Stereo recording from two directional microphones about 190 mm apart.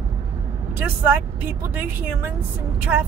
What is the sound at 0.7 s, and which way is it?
Speech, 10° right (ahead or behind).